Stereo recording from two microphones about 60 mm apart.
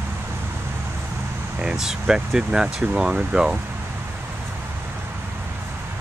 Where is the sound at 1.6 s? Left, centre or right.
Centre.